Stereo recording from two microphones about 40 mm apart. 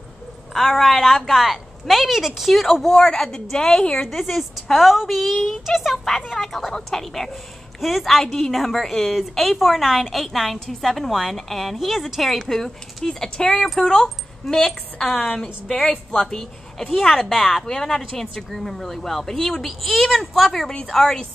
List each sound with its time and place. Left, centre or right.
0.6 s a woman's voice: centre
2.9 s a woman's voice: centre
3.9 s a woman's voice: centre